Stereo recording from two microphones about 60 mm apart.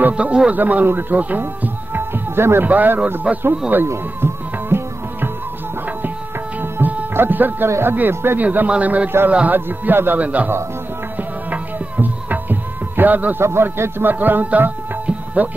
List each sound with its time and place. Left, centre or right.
0.1 s a man's voice: centre; by 2.7 s right
2.7 s a man's voice: right
3.3 s speech: centre
3.7 s tabla: right
6.6 s music: right
7.2 s speech: right
8.4 s a man's voice: right
9.7 s a man's voice: right
11.1 s music: right
13.4 s speech: right